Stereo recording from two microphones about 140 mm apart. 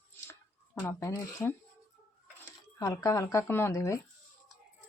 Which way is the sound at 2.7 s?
25° left (ahead or behind).